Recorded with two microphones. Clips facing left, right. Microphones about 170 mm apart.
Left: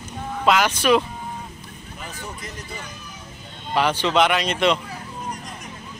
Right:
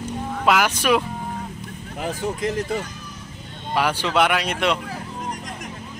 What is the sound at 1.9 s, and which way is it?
Speech, 90° right.